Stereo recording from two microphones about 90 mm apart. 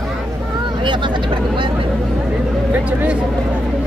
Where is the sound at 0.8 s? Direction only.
60° right (ahead or behind).